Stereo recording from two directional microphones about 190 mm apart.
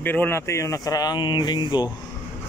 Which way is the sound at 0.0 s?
10° left (ahead or behind).